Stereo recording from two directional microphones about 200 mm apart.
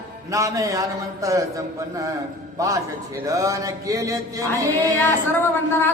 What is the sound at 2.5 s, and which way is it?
Speech, 15° right (ahead or behind).